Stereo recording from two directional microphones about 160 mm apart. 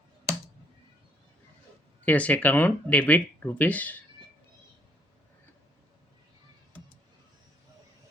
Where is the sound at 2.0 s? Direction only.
10° left (ahead or behind).